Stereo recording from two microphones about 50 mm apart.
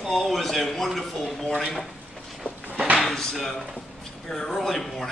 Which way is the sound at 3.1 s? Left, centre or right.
Centre.